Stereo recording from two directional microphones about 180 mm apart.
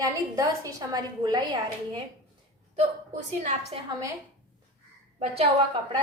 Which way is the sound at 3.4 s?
40° right (ahead or behind).